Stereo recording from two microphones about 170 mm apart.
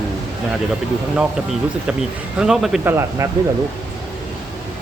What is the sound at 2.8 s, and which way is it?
Speech, 15° right (ahead or behind).